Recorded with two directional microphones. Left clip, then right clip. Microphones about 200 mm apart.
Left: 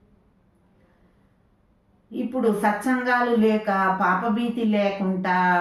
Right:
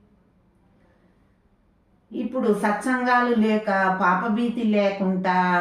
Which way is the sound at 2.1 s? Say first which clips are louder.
Even; 10° left (ahead or behind).